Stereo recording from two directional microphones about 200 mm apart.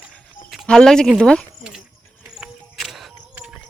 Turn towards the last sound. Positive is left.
turn(degrees=0)  # may be behind; listen again after turning